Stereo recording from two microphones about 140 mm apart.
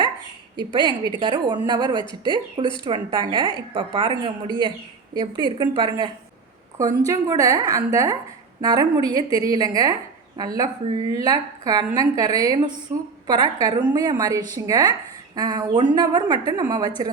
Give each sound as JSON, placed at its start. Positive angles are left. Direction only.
{"t": 0.5, "sound": "a woman's voice", "side_deg": -35}
{"t": 7.1, "sound": "a woman's voice", "side_deg": -25}